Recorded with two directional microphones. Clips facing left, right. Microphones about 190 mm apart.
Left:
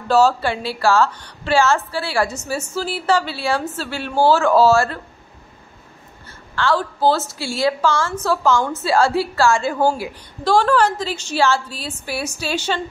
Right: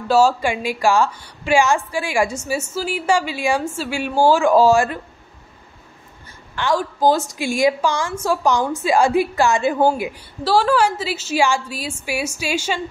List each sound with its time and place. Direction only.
0.1 s a woman's voice: 10° right (ahead or behind)
6.2 s a woman's voice: 15° right (ahead or behind)
10.4 s a woman's voice: 5° right (ahead or behind)